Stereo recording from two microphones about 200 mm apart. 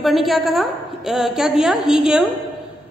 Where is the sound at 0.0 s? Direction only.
Centre (ahead or behind).